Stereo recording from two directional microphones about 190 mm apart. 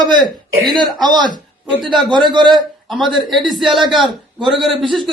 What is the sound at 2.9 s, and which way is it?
Speech, centre (ahead or behind).